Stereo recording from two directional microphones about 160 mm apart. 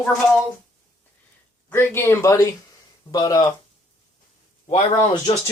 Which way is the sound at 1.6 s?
15° left (ahead or behind).